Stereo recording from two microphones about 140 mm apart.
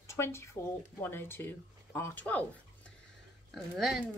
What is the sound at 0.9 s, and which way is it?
Speech, 15° left (ahead or behind).